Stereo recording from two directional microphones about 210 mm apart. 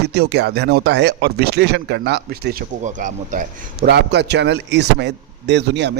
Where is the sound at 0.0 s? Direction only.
50° right (ahead or behind).